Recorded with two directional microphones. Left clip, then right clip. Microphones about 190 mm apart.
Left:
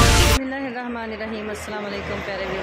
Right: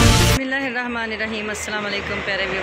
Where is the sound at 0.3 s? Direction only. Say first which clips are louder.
Right 2 dB; centre (ahead or behind).